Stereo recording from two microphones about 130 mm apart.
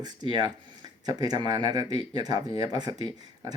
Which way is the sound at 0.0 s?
30° right (ahead or behind).